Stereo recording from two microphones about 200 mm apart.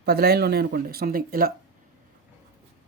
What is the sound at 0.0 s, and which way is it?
Speech, 50° right (ahead or behind).